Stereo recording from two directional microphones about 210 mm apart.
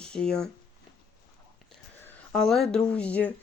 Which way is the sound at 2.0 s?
Centre (ahead or behind).